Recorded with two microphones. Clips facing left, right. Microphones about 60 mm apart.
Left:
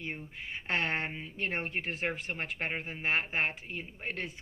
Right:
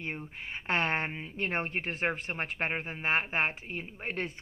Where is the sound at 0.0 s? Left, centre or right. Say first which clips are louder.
Right 2 dB; right.